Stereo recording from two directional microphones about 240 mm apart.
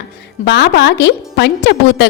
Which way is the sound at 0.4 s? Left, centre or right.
Left.